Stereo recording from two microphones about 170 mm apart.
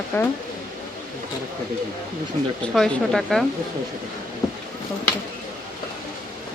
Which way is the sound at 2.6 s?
5° left (ahead or behind).